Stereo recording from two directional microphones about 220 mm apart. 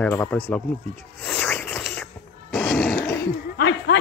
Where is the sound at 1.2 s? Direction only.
5° left (ahead or behind).